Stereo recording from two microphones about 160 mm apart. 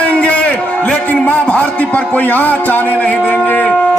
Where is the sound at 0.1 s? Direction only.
10° left (ahead or behind).